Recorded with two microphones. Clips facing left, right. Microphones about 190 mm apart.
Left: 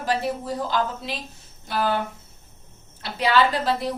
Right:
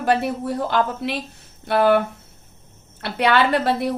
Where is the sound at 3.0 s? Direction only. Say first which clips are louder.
Right 2 dB; 60° right (ahead or behind).